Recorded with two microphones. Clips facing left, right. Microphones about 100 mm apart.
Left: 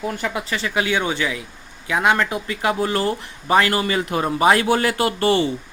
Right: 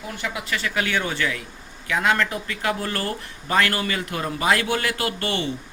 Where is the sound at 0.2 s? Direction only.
35° left (ahead or behind).